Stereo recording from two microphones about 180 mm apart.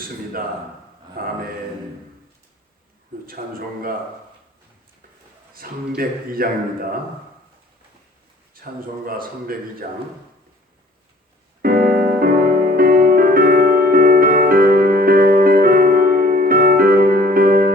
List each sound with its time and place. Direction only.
1.2 s speech: 55° right (ahead or behind)
3.4 s speech: 45° right (ahead or behind)
5.6 s speech: 50° right (ahead or behind)
8.5 s speech: 55° right (ahead or behind)
11.6 s music: 55° right (ahead or behind)